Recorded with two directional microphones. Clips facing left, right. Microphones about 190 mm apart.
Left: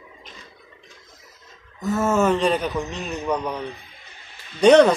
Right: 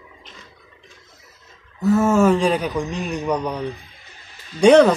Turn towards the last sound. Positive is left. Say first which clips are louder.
# right 1 dB
turn(degrees=-5)  # may be behind; listen again after turning